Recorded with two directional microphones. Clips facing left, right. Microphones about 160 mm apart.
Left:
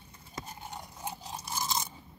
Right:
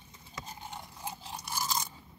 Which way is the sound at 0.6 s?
15° left (ahead or behind).